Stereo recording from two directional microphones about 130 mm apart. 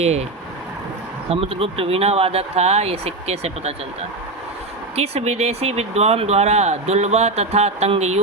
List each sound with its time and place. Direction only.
0.0 s speech: 55° right (ahead or behind)
1.3 s speech: 50° right (ahead or behind)
4.9 s speech: 55° right (ahead or behind)